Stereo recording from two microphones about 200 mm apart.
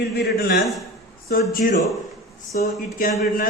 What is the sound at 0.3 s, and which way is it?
Speech, 50° left (ahead or behind).